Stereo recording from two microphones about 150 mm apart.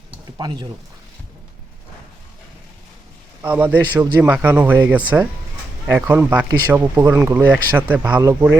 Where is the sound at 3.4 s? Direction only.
10° right (ahead or behind); by 8.3 s 30° right (ahead or behind).